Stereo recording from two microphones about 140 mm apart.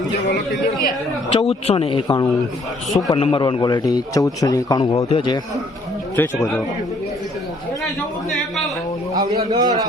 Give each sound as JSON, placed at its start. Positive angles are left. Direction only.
{"t": 1.3, "sound": "a man's voice", "side_deg": 45}
{"t": 2.0, "sound": "a man's voice", "side_deg": 30}
{"t": 3.1, "sound": "a man's voice", "side_deg": 40}
{"t": 6.2, "sound": "speech", "side_deg": 15}
{"t": 9.1, "sound": "a man's voice", "side_deg": -30}